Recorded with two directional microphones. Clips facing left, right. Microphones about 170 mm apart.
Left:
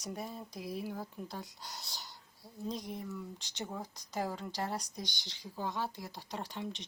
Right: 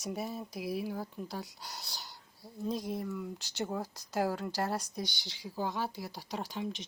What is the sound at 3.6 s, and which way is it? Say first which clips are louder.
Speech: right 6 dB; 65° right (ahead or behind).